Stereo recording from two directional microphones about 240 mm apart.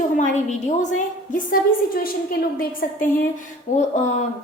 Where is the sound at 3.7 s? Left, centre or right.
Left.